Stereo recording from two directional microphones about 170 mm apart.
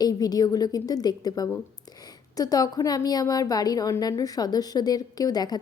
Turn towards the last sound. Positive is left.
turn(degrees=25)  # may be behind; listen again after turning